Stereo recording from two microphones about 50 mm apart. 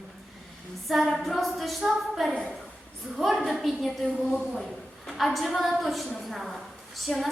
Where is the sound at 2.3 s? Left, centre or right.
Centre.